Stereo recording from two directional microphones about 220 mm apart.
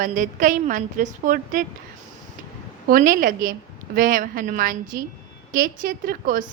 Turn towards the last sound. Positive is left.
turn(degrees=-40)  # may be behind; listen again after turning